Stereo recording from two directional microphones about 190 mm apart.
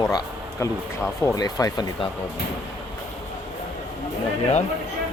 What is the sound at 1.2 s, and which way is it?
Speech, 20° left (ahead or behind).